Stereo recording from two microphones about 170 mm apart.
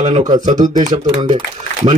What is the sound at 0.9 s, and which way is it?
Speech, 25° right (ahead or behind).